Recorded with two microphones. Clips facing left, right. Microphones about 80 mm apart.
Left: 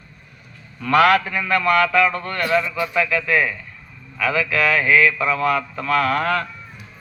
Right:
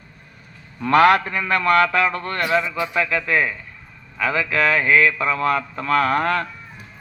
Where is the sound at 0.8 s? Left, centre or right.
Right.